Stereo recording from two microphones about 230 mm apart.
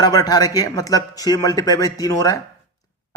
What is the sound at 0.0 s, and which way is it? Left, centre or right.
A man's voice, centre.